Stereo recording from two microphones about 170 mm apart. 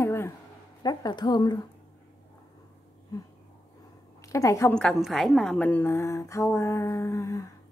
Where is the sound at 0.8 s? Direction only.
25° left (ahead or behind).